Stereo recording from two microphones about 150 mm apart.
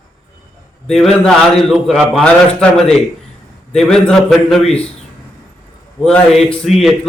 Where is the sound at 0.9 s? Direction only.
5° left (ahead or behind).